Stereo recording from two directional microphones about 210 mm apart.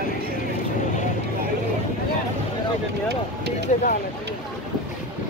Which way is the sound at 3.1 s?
50° right (ahead or behind).